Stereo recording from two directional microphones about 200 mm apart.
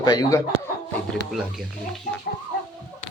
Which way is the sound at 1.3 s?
Centre (ahead or behind).